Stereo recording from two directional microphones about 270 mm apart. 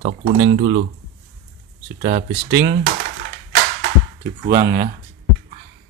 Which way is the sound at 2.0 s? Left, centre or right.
Right.